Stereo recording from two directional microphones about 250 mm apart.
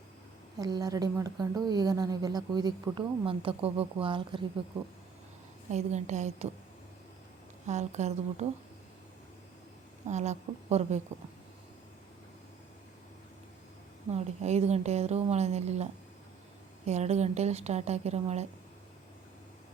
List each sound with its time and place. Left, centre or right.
0.6 s speech: centre
5.7 s a woman's voice: right
7.7 s a woman's voice: right
10.1 s a woman's voice: right
14.1 s a woman's voice: right